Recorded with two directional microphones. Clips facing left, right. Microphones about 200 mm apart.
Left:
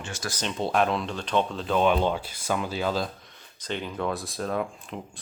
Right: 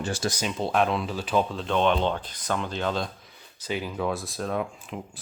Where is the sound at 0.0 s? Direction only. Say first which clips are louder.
Right 8 dB; 35° right (ahead or behind).